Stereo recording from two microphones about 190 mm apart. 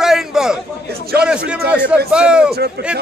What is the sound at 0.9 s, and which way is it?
Speech, 55° right (ahead or behind).